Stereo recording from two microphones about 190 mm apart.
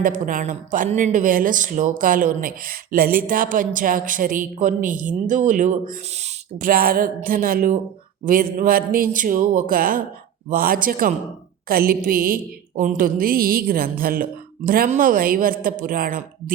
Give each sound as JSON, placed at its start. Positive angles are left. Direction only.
{"t": 0.0, "sound": "speech", "side_deg": -45}